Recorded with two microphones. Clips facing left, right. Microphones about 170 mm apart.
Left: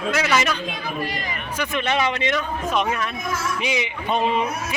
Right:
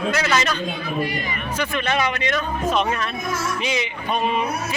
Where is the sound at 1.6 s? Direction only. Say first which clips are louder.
Even; 20° left (ahead or behind).